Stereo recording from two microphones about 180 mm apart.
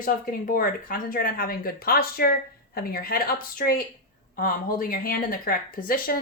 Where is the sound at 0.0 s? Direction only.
50° left (ahead or behind).